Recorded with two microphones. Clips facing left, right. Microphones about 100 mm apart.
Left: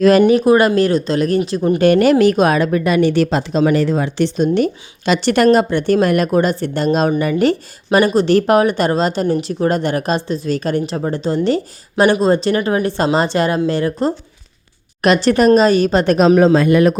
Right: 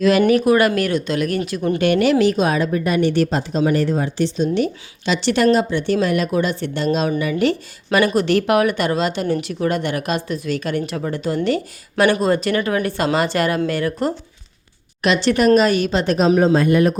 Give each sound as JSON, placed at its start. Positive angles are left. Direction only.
{"t": 0.0, "sound": "speech", "side_deg": 45}
{"t": 0.3, "sound": "speech", "side_deg": 25}
{"t": 1.8, "sound": "speech", "side_deg": 45}
{"t": 4.4, "sound": "a woman's voice", "side_deg": 50}
{"t": 15.0, "sound": "a woman's voice", "side_deg": 45}
{"t": 16.1, "sound": "a man's voice", "side_deg": 75}